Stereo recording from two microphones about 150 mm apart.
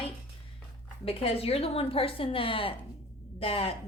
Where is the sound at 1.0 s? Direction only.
40° left (ahead or behind).